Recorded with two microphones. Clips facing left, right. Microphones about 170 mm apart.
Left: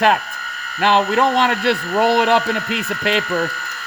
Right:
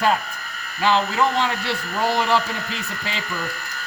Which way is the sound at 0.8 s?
65° left (ahead or behind).